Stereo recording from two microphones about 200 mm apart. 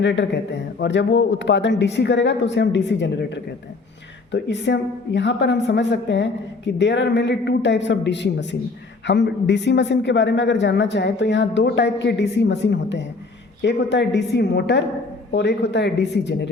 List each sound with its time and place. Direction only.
0.0 s a man's voice: 60° left (ahead or behind)